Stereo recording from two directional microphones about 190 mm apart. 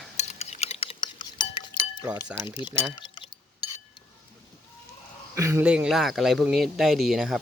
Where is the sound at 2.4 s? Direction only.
25° left (ahead or behind).